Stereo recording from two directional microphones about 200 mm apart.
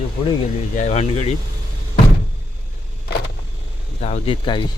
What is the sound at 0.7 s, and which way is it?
Speech, 35° left (ahead or behind).